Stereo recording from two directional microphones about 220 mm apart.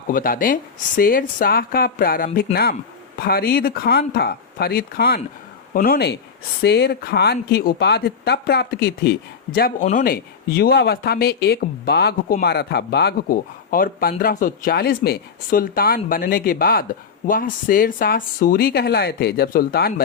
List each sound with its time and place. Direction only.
0.1 s speech: 40° left (ahead or behind)